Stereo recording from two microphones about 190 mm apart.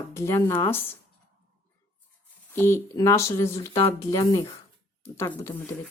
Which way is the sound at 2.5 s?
10° left (ahead or behind).